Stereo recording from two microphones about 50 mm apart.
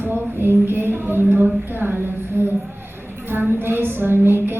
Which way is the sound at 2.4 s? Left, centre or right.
Right.